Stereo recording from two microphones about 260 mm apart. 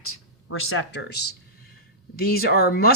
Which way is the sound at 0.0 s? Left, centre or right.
Left.